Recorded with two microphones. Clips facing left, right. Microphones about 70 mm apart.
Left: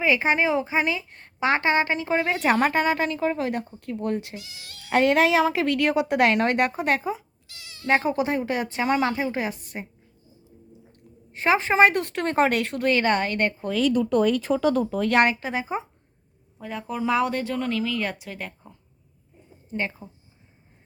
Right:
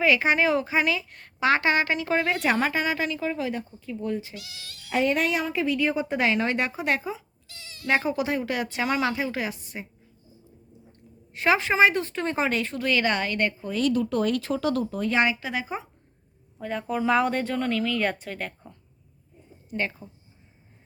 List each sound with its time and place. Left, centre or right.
0.0 s a woman's voice: left
2.4 s a woman's voice: left
11.3 s speech: left
11.8 s speech: left
15.0 s a woman's voice: left
15.4 s speech: left
16.6 s speech: centre
19.7 s a woman's voice: left